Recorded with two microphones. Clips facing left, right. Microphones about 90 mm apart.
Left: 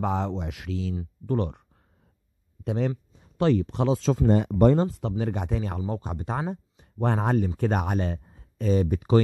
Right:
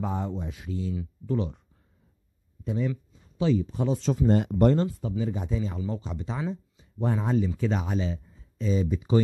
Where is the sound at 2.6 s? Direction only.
65° left (ahead or behind); by 4.2 s 85° left.